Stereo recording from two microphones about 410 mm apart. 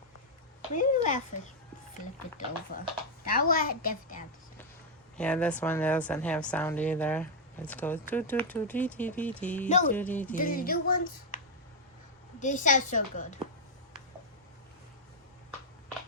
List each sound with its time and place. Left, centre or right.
0.7 s a woman's voice: centre
3.2 s a woman's voice: left
5.1 s speech: centre
9.6 s speech: centre
9.9 s speech: centre
10.3 s a woman's voice: left
12.4 s a woman's voice: centre